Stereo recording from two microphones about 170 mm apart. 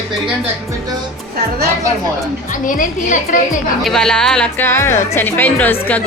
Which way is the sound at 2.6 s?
50° left (ahead or behind).